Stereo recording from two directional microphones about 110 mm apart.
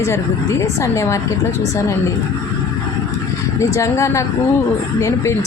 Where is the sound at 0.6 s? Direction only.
25° left (ahead or behind).